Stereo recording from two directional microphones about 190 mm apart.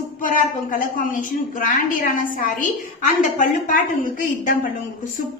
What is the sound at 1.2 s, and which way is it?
A woman's voice, 45° left (ahead or behind).